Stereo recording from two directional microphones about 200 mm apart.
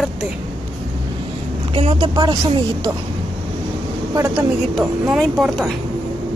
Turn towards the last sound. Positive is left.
turn(degrees=0)  # may be behind; listen again after turning